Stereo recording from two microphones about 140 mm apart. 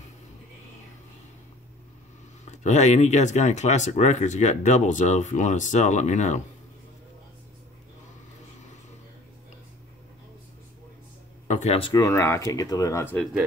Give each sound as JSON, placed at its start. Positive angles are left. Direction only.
{"t": 2.5, "sound": "speech", "side_deg": 55}
{"t": 11.4, "sound": "a sound", "side_deg": 55}
{"t": 11.8, "sound": "speech", "side_deg": 25}